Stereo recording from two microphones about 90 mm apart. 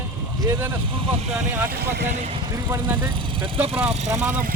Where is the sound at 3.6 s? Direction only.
90° right.